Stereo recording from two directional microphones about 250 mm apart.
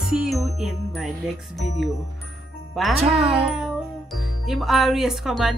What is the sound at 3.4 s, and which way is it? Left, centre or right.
Speech, centre.